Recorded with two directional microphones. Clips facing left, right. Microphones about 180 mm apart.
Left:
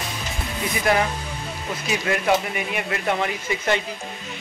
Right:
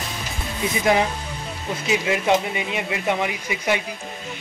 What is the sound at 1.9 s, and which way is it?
A man's voice, 20° right (ahead or behind).